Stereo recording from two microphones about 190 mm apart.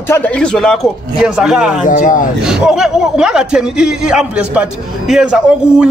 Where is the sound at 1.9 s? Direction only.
45° left (ahead or behind).